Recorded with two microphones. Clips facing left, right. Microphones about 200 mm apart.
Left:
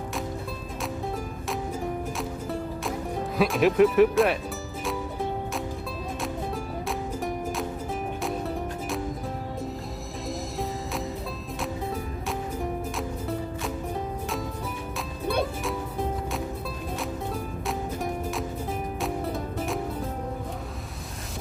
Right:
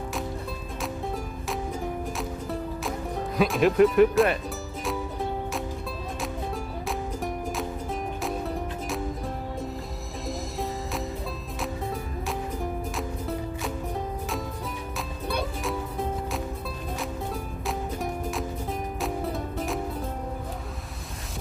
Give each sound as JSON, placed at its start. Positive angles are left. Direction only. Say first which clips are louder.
{"t": 0.8, "sound": "music", "louder": "even", "side_deg": 0}
{"t": 3.3, "sound": "speech", "louder": "even", "side_deg": 0}
{"t": 4.9, "sound": "music", "louder": "even", "side_deg": 0}
{"t": 6.8, "sound": "music", "louder": "even", "side_deg": 0}
{"t": 10.2, "sound": "music", "louder": "even", "side_deg": 0}
{"t": 13.0, "sound": "music", "louder": "left 1 dB", "side_deg": 0}
{"t": 15.6, "sound": "music", "louder": "even", "side_deg": 0}
{"t": 17.7, "sound": "music", "louder": "even", "side_deg": 0}